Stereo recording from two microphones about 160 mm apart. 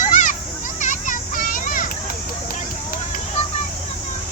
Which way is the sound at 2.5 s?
55° left (ahead or behind).